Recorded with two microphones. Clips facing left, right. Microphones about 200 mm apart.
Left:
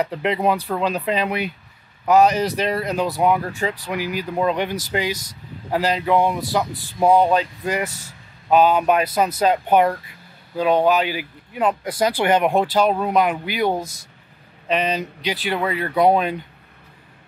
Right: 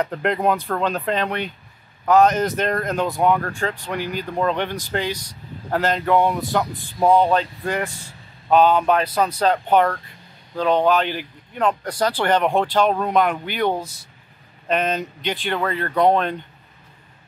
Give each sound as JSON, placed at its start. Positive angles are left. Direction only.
{"t": 0.0, "sound": "speech", "side_deg": 5}
{"t": 5.1, "sound": "speech", "side_deg": 45}
{"t": 5.7, "sound": "speech", "side_deg": 5}